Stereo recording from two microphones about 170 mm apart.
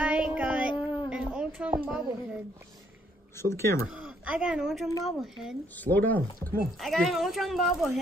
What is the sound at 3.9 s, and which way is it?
Speech, 5° right (ahead or behind).